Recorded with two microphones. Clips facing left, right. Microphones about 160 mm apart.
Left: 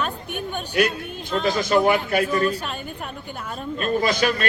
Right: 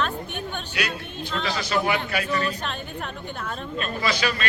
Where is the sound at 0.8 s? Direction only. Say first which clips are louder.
Left 9 dB; 50° left (ahead or behind).